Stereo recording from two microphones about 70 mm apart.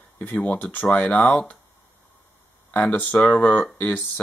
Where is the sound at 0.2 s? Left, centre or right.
Left.